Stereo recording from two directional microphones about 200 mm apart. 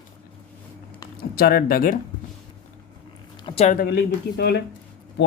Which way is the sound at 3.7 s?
50° left (ahead or behind).